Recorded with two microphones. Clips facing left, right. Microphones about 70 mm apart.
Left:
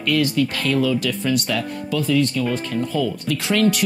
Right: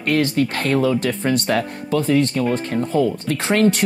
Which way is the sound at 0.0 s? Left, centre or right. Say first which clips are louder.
Right 1 dB; right.